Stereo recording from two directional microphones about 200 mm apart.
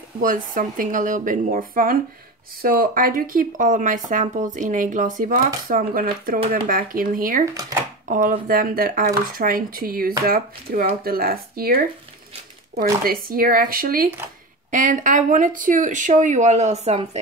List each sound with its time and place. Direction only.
0.2 s speech: 40° right (ahead or behind)